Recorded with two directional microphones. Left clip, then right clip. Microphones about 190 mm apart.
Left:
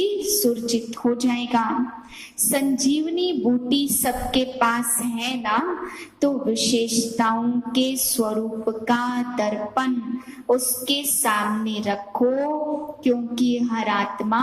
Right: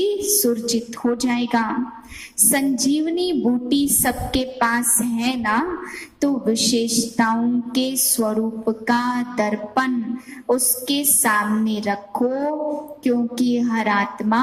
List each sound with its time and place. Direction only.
0.0 s a woman's voice: 50° right (ahead or behind)